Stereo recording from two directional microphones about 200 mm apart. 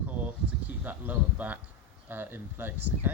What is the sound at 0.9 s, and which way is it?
Speech, 10° right (ahead or behind).